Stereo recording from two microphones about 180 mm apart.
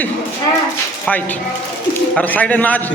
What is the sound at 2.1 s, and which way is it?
Speech, 10° left (ahead or behind).